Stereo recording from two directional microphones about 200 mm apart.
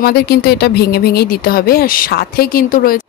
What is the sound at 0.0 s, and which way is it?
Speech, 50° left (ahead or behind).